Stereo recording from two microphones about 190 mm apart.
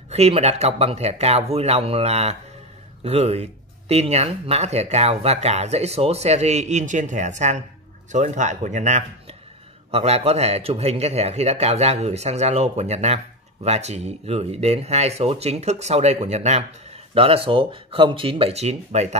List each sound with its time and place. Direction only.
0.1 s a man's voice: 35° right (ahead or behind)